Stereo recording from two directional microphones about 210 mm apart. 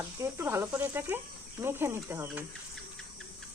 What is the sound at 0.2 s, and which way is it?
Speech, 10° right (ahead or behind).